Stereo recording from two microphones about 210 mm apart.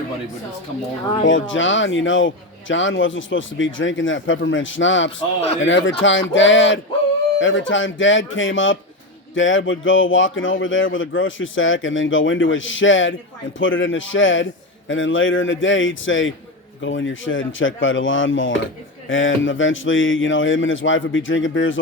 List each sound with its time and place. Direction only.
1.2 s a man's voice: 65° left (ahead or behind)